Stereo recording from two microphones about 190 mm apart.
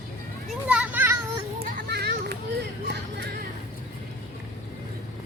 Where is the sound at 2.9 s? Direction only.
65° right (ahead or behind).